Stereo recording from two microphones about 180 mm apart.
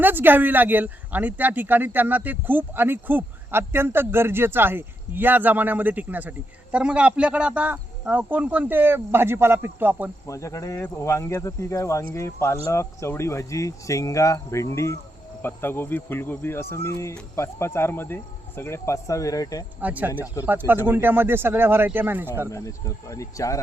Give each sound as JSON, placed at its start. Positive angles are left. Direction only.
{"t": 0.0, "sound": "speech", "side_deg": -10}
{"t": 10.2, "sound": "speech", "side_deg": 15}
{"t": 19.8, "sound": "speech", "side_deg": -10}
{"t": 22.4, "sound": "speech", "side_deg": 15}